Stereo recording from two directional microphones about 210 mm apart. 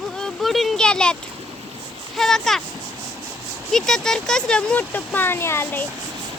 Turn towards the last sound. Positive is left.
turn(degrees=10)  # may be behind; listen again after turning